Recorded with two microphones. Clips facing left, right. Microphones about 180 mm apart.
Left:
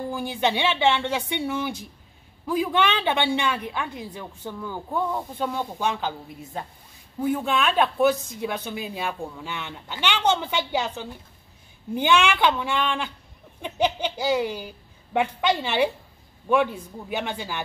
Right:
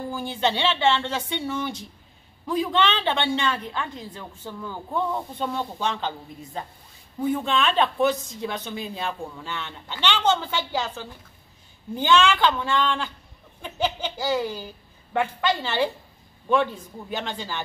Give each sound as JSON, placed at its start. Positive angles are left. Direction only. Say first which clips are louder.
{"t": 0.1, "sound": "a woman's voice", "louder": "even", "side_deg": 15}